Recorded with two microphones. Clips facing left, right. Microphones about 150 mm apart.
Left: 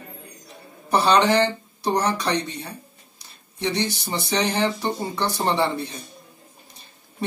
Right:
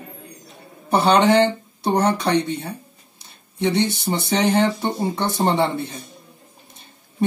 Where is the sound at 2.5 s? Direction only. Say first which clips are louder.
Right 7 dB; 55° right (ahead or behind).